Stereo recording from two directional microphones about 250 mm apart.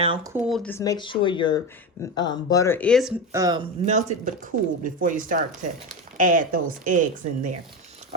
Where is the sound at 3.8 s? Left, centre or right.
Right.